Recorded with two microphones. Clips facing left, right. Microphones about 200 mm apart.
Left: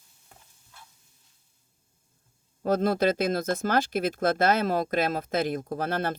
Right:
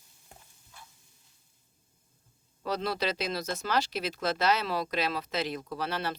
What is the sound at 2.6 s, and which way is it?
Speech, 50° left (ahead or behind).